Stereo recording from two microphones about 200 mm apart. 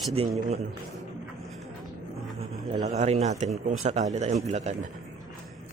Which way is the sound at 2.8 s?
35° right (ahead or behind).